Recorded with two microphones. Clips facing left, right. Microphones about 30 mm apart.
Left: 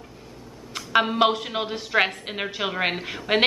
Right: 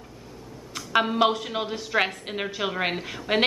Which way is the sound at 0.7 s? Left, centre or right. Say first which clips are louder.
Left 2 dB; centre.